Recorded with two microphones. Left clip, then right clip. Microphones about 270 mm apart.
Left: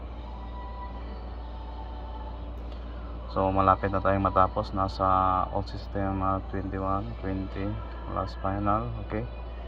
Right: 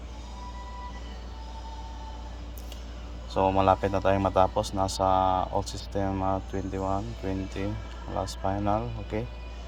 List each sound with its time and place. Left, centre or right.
3.3 s speech: right